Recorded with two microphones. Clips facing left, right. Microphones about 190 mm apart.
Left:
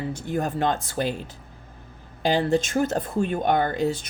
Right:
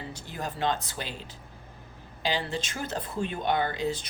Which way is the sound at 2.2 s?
50° left (ahead or behind).